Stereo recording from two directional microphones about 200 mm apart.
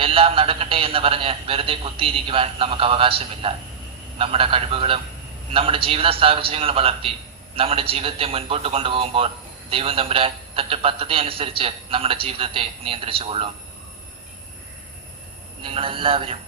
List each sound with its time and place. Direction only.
0.0 s a man's voice: 25° right (ahead or behind)
15.6 s a man's voice: 25° right (ahead or behind)